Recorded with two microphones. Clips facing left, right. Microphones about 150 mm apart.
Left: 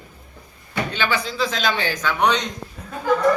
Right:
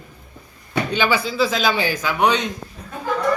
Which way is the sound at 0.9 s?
10° right (ahead or behind).